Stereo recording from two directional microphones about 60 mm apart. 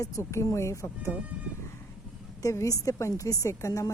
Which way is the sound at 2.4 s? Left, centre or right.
Left.